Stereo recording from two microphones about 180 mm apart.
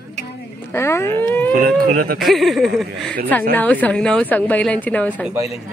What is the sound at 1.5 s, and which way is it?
Speech, 50° right (ahead or behind).